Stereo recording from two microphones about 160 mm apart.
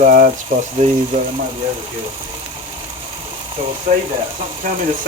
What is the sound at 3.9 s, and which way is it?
Speech, 50° right (ahead or behind).